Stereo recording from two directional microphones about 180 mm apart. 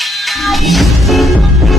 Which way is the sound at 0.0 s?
Centre (ahead or behind).